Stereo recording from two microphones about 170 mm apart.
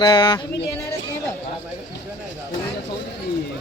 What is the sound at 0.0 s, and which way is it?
Speech, 25° left (ahead or behind).